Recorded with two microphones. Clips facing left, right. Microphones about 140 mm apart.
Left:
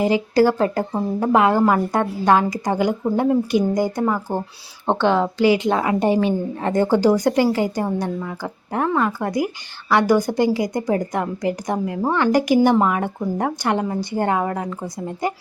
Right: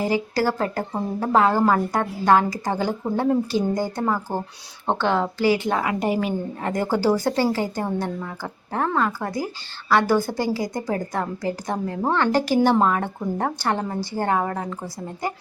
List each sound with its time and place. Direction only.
0.0 s a woman's voice: 20° left (ahead or behind)